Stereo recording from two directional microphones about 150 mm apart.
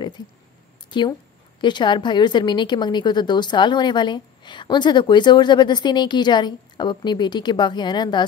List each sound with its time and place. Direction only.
0.8 s a woman's voice: 30° left (ahead or behind)